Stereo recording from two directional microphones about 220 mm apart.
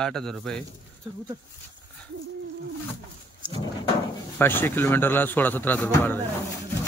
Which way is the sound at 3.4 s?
20° right (ahead or behind).